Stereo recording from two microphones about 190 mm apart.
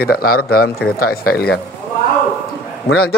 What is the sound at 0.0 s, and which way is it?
Speech, 50° left (ahead or behind).